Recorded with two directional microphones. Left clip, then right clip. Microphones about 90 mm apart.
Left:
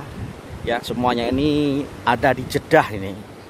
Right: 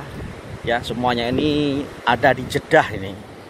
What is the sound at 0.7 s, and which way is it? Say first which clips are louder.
Speech: even; 60° left (ahead or behind).